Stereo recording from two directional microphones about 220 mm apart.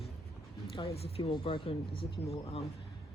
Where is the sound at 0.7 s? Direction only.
25° left (ahead or behind).